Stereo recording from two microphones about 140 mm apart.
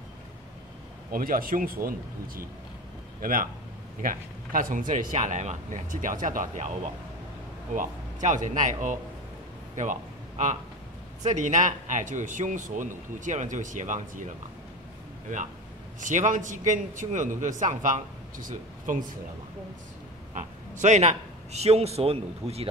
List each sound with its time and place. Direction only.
1.1 s speech: 90° right; by 6.7 s 60° right (ahead or behind)
7.7 s a man's voice: 65° right (ahead or behind)
16.0 s speech: 65° right (ahead or behind)
20.3 s a man's voice: 60° right (ahead or behind)